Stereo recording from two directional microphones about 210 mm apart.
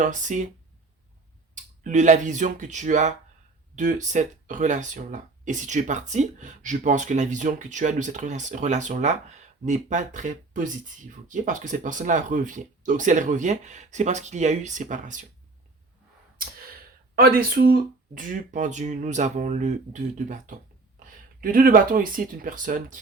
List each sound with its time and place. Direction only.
0.0 s speech: 35° right (ahead or behind)
1.8 s speech: 35° right (ahead or behind)
16.4 s speech: 45° right (ahead or behind)